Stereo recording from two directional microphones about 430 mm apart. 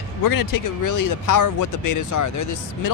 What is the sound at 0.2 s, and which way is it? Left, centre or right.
Speech, left.